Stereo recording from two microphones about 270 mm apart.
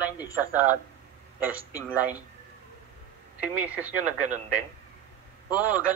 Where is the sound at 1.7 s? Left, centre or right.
Centre.